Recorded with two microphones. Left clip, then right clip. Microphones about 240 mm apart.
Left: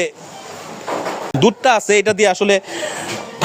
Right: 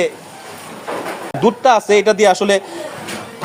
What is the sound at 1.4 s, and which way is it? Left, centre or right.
Speech, left.